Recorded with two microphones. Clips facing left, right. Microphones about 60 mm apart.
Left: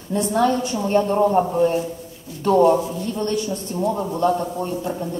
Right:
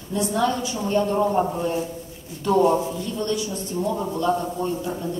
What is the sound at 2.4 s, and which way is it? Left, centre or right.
A woman's voice, left.